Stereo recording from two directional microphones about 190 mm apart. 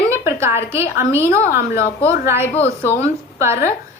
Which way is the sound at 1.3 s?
50° left (ahead or behind).